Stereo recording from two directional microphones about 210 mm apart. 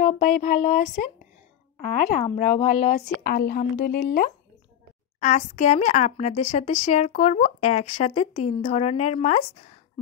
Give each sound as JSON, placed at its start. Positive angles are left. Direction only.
{"t": 0.0, "sound": "speech", "side_deg": 35}
{"t": 5.2, "sound": "speech", "side_deg": 35}